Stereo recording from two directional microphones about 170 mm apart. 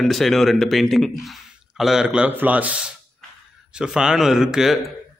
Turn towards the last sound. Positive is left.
turn(degrees=-5)  # may be behind; listen again after turning